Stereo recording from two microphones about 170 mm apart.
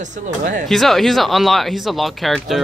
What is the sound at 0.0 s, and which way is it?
Speech, 45° right (ahead or behind).